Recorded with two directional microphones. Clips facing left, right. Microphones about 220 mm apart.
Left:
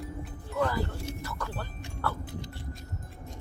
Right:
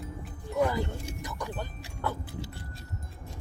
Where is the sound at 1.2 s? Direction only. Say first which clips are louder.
Right 1 dB; 15° right (ahead or behind).